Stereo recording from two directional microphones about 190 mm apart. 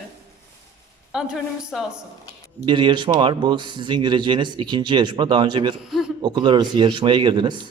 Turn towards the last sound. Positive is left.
turn(degrees=-25)  # may be behind; listen again after turning